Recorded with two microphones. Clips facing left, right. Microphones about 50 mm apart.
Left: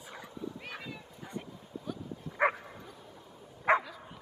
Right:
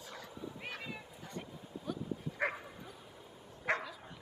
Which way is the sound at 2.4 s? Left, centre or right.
Centre.